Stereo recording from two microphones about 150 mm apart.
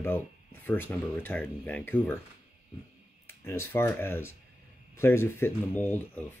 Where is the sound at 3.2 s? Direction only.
15° left (ahead or behind).